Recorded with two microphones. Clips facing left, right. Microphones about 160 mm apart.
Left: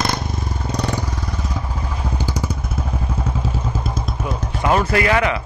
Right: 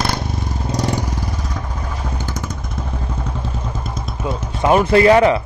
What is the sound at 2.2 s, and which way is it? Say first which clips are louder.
Motorcycle: left 2 dB; 10° left (ahead or behind).